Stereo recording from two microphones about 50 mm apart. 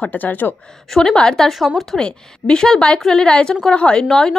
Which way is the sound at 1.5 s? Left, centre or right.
Centre.